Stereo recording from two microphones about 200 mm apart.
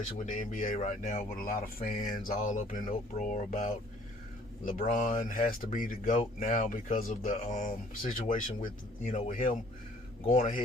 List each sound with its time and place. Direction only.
0.2 s speech: 40° left (ahead or behind)